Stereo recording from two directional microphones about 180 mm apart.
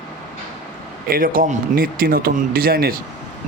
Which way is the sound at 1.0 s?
50° right (ahead or behind).